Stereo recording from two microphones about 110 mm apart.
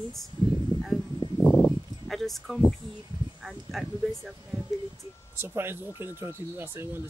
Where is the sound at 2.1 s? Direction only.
Centre (ahead or behind).